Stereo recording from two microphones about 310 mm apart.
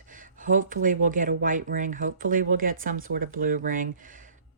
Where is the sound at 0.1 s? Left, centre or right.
Right.